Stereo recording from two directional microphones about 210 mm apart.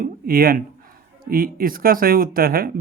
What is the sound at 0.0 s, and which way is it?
Speech, 45° right (ahead or behind).